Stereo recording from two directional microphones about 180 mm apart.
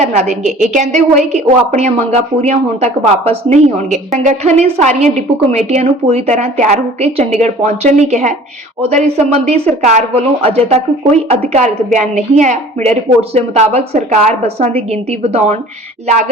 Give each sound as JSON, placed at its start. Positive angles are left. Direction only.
{"t": 0.0, "sound": "a woman's voice", "side_deg": -40}